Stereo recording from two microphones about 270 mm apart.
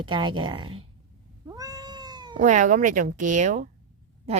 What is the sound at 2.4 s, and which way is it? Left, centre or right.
Speech, right.